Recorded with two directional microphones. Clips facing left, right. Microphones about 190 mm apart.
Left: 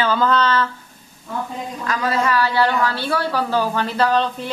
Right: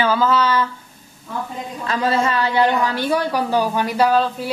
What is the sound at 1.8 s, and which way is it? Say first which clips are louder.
A woman's voice: right 2 dB; 30° right (ahead or behind).